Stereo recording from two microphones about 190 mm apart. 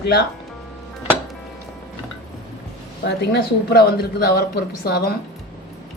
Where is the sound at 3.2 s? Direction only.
60° left (ahead or behind).